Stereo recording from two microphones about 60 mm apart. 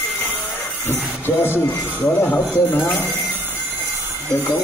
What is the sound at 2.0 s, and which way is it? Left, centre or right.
Speech, left.